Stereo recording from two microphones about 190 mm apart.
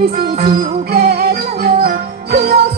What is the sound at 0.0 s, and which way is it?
Music, 50° right (ahead or behind).